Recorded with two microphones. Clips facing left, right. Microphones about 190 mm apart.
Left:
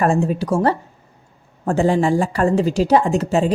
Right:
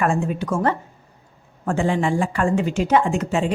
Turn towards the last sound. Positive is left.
turn(degrees=35)  # may be behind; listen again after turning